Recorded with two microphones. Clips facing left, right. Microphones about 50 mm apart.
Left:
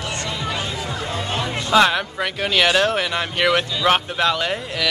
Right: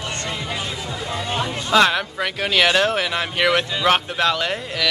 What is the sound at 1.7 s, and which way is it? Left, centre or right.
Speech, centre.